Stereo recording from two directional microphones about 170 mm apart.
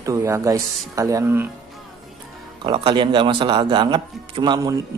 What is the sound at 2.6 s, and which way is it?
A man's voice, 30° right (ahead or behind).